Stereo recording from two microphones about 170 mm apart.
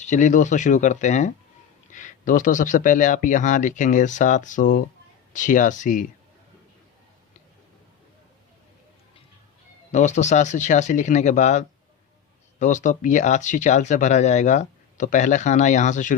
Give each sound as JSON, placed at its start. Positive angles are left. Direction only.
{"t": 0.0, "sound": "speech", "side_deg": 45}
{"t": 9.9, "sound": "speech", "side_deg": 45}